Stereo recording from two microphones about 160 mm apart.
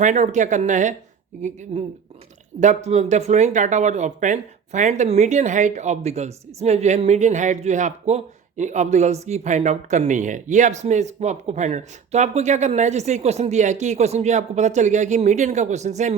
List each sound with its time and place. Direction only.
0.0 s speech: 50° right (ahead or behind)